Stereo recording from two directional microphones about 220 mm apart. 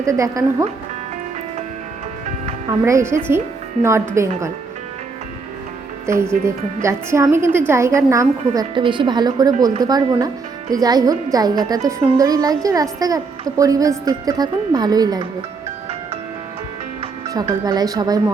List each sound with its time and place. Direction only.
0.0 s a woman's voice: 15° right (ahead or behind)
2.6 s a woman's voice: 15° right (ahead or behind)
6.1 s a woman's voice: 10° right (ahead or behind)
17.2 s a woman's voice: 15° right (ahead or behind)